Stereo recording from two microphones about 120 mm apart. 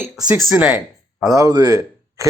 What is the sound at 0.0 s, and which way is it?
Speech, 10° right (ahead or behind).